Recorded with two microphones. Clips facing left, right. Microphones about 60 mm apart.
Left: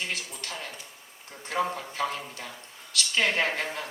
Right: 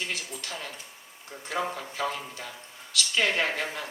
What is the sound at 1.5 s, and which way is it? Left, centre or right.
A man's voice, left.